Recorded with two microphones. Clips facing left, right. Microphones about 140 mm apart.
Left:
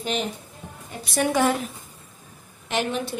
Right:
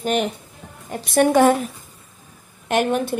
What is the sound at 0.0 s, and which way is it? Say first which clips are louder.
A woman's voice: right 6 dB; 55° right (ahead or behind).